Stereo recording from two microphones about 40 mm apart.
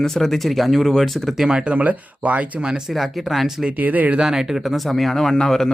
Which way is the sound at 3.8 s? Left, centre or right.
Right.